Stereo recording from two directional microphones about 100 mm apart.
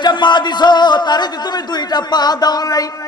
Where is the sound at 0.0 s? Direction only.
50° left (ahead or behind).